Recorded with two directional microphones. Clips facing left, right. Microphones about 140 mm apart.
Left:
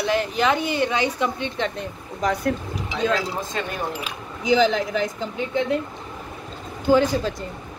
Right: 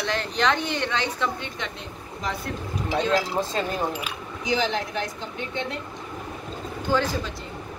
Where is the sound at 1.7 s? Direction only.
50° left (ahead or behind).